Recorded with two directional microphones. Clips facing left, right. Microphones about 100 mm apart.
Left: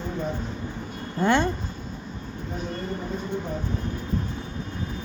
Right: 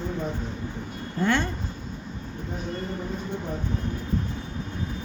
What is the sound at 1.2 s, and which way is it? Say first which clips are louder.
Speech: left 3 dB; 20° left (ahead or behind).